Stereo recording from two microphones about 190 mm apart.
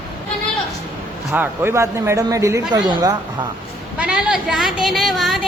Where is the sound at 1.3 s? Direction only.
10° right (ahead or behind).